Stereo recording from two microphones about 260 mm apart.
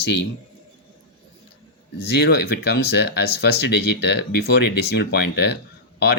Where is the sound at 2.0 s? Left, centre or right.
Left.